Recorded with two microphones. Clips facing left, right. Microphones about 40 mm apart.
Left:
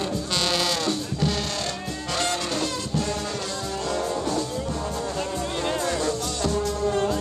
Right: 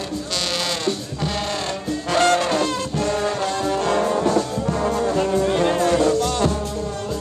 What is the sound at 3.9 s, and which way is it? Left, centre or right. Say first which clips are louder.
Music: right 5 dB; right.